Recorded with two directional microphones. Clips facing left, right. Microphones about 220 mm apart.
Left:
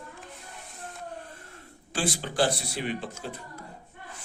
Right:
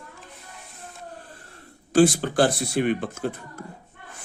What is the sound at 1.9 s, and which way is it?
Speech, 45° right (ahead or behind).